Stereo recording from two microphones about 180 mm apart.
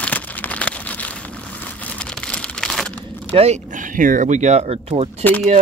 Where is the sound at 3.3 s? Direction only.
35° right (ahead or behind).